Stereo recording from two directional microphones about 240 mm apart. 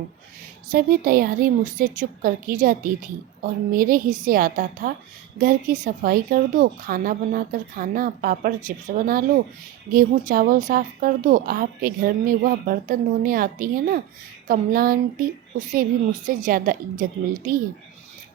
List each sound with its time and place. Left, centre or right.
0.7 s speech: right